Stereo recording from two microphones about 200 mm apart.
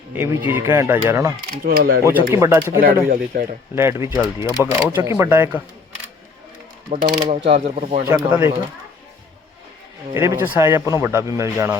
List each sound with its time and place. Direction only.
0.1 s speech: 10° right (ahead or behind)
1.6 s speech: 50° right (ahead or behind)
2.0 s speech: 15° right (ahead or behind)
2.8 s speech: 45° right (ahead or behind)
3.8 s speech: 15° right (ahead or behind)
7.0 s speech: 20° right (ahead or behind)
8.0 s speech: 10° right (ahead or behind)
10.2 s speech: 10° right (ahead or behind)